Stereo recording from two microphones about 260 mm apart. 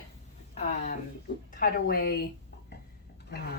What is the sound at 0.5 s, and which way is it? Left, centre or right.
A woman's voice, left.